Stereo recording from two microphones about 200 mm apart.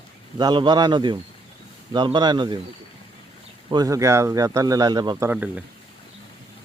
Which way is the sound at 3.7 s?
20° right (ahead or behind).